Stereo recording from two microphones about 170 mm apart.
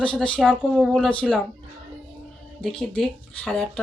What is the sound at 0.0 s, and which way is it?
Speech, 5° left (ahead or behind).